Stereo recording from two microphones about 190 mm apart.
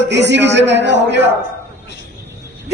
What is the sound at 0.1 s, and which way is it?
Speech, 65° right (ahead or behind).